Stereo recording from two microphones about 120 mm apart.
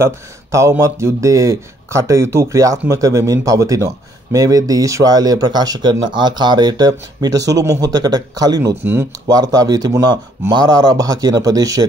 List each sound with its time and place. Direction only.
0.0 s speech: 25° right (ahead or behind)